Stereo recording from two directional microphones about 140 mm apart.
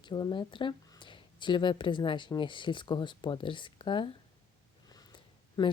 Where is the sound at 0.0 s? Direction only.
30° left (ahead or behind).